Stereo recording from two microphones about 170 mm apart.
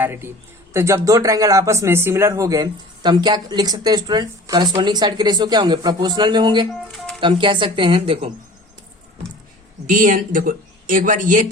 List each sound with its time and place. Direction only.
0.0 s a man's voice: 15° right (ahead or behind)
6.9 s music: centre (ahead or behind)
7.2 s speech: 30° right (ahead or behind)
9.9 s speech: 50° right (ahead or behind)